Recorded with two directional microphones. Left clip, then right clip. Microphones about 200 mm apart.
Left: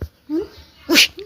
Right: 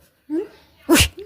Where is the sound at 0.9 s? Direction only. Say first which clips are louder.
Left 2 dB; 35° right (ahead or behind).